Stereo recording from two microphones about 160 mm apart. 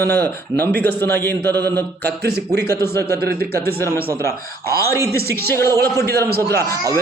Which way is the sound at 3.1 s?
80° right.